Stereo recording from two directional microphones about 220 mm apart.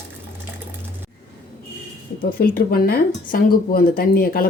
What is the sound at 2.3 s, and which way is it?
Speech, 40° left (ahead or behind).